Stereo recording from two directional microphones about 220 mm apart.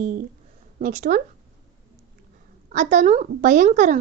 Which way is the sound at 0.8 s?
40° right (ahead or behind).